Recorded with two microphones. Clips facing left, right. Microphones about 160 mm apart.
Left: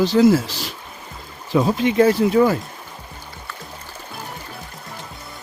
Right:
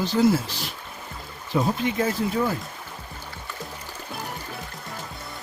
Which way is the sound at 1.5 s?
90° left.